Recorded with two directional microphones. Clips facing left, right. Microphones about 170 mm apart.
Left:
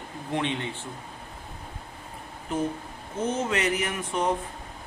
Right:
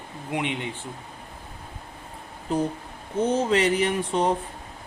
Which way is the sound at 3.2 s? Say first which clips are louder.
Right 5 dB; 30° right (ahead or behind).